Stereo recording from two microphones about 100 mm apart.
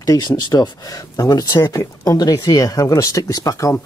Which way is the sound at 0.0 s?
40° left (ahead or behind).